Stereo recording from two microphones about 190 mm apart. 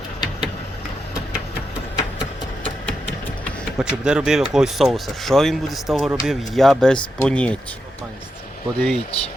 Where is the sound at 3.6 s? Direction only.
5° right (ahead or behind).